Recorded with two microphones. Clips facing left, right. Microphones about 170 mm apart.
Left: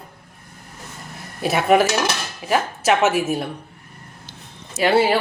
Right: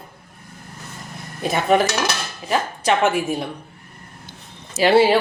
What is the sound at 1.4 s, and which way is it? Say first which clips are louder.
Speech: left 1 dB; 5° left (ahead or behind).